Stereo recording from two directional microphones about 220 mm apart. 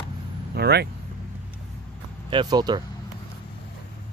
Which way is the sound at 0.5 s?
45° right (ahead or behind).